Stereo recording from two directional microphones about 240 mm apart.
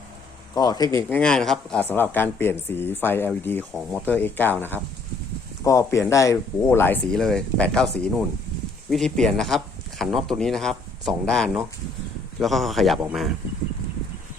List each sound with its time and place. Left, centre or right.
0.5 s speech: centre
0.9 s speech: centre
5.6 s speech: centre